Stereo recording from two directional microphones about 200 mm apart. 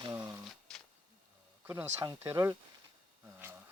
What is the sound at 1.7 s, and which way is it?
Speech, 15° right (ahead or behind).